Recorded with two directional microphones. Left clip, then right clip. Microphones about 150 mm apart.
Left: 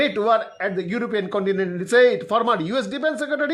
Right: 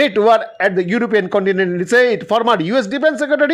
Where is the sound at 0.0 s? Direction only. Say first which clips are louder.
Right 7 dB; 25° right (ahead or behind).